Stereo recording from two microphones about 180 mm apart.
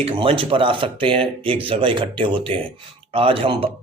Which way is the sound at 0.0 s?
30° right (ahead or behind).